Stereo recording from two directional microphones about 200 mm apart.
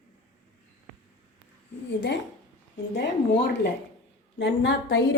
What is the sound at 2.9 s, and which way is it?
A woman's voice, 55° left (ahead or behind).